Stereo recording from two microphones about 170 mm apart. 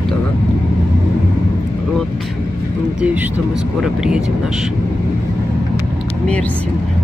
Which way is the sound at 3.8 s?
5° right (ahead or behind).